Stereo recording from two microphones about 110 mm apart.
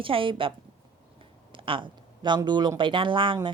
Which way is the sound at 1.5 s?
50° right (ahead or behind).